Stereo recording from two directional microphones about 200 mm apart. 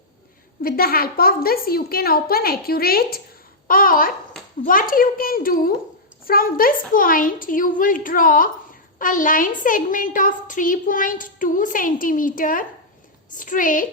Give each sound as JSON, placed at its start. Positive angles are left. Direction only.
{"t": 0.6, "sound": "a woman's voice", "side_deg": 50}